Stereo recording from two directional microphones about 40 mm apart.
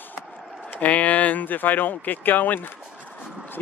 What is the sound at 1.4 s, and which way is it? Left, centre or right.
Speech, left.